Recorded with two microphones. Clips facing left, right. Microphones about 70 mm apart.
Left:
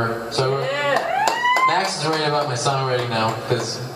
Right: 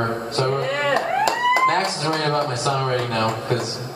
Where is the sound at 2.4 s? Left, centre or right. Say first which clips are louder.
Left 1 dB; right.